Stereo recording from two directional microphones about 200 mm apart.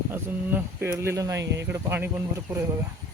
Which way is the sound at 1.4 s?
60° right (ahead or behind).